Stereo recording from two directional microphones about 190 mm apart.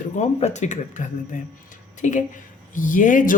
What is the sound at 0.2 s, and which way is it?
Speech, 35° left (ahead or behind).